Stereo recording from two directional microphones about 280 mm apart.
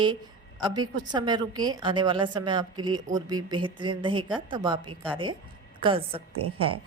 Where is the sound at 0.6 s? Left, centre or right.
Centre.